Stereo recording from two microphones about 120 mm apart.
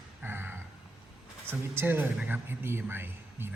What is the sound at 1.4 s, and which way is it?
Speech, 20° right (ahead or behind).